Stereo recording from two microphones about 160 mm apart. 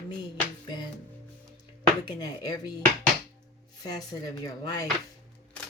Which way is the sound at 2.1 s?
25° left (ahead or behind).